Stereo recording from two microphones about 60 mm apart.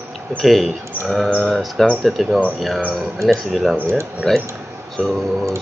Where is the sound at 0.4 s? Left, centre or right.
Centre.